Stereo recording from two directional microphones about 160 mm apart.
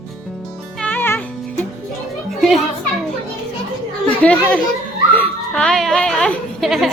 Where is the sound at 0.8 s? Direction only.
10° left (ahead or behind).